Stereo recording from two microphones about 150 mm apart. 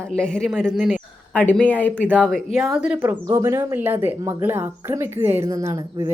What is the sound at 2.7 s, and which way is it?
Speech, 10° right (ahead or behind).